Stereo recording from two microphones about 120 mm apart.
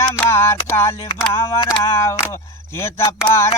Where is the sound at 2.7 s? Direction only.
20° left (ahead or behind).